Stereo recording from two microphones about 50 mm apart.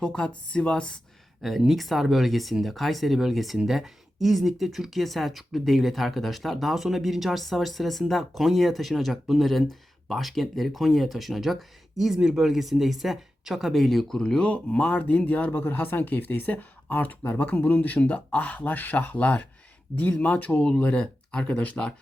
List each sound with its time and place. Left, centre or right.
0.0 s speech: centre
1.4 s speech: centre; by 15.5 s left
15.5 s speech: left; by 21.6 s centre
21.6 s speech: left